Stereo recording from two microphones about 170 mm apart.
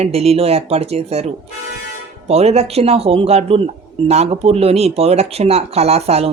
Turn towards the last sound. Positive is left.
turn(degrees=-40)  # may be behind; listen again after turning